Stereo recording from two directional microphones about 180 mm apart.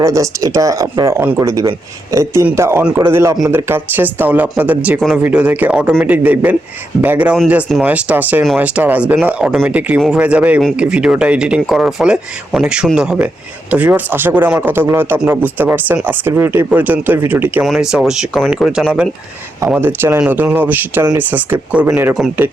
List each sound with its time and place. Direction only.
0.0 s speech: 15° right (ahead or behind); by 19.0 s centre (ahead or behind)
19.6 s speech: 10° right (ahead or behind)